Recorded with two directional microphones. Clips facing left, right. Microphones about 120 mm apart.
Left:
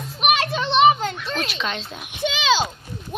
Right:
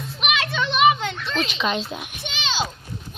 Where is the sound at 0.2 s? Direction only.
40° left (ahead or behind).